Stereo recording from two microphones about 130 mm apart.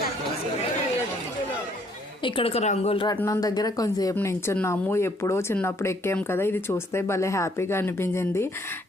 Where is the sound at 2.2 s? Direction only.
45° left (ahead or behind).